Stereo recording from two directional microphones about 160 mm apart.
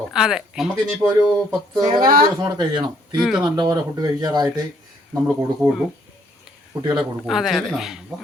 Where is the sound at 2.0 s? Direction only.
65° right (ahead or behind).